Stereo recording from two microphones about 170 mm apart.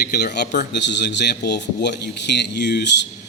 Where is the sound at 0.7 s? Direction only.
90° left.